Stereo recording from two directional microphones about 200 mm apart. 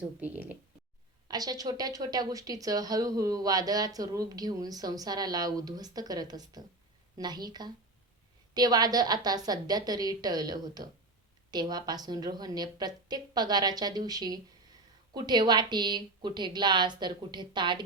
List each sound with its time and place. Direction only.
0.2 s speech: 10° right (ahead or behind)
1.3 s speech: 20° right (ahead or behind)